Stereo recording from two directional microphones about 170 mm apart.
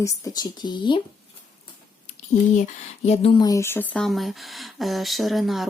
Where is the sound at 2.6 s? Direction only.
40° left (ahead or behind).